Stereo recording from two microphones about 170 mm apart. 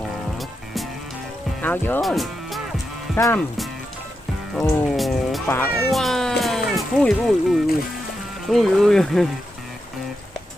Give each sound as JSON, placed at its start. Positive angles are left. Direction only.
{"t": 0.3, "sound": "music", "side_deg": 0}
{"t": 1.6, "sound": "speech", "side_deg": 10}
{"t": 2.0, "sound": "speech", "side_deg": 0}
{"t": 3.2, "sound": "speech", "side_deg": 20}
{"t": 4.9, "sound": "music", "side_deg": 0}
{"t": 5.5, "sound": "speech", "side_deg": 10}